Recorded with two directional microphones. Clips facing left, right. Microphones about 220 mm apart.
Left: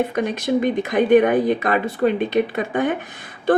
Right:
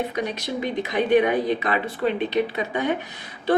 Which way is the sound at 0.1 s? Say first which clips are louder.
Left 7 dB; 50° left (ahead or behind).